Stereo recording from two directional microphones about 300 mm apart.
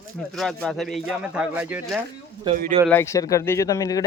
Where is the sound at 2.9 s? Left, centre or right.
Centre.